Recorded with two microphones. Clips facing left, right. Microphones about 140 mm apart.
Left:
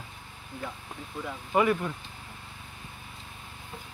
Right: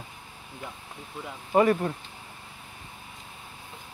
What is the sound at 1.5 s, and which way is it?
Speech, 35° right (ahead or behind).